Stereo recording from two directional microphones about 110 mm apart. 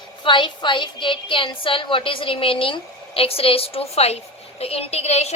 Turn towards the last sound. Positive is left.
turn(degrees=70)  # may be behind; listen again after turning